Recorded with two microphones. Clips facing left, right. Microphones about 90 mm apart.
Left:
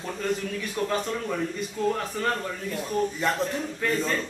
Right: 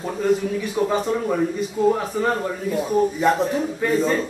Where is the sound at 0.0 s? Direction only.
15° right (ahead or behind).